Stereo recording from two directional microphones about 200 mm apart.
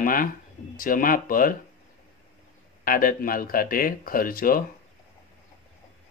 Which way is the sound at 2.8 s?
45° left (ahead or behind).